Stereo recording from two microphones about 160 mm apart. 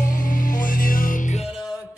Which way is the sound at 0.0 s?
55° left (ahead or behind).